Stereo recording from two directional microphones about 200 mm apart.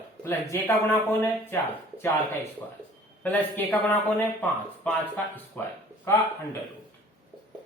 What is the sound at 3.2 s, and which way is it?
A man's voice, 10° left (ahead or behind).